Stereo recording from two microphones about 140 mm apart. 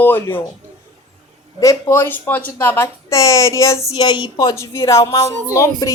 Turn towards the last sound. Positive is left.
turn(degrees=20)  # may be behind; listen again after turning